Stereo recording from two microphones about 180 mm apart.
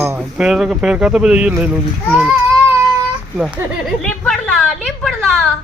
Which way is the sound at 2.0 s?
5° left (ahead or behind).